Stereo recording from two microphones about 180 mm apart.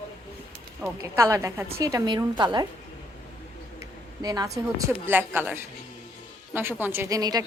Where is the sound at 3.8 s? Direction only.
20° right (ahead or behind).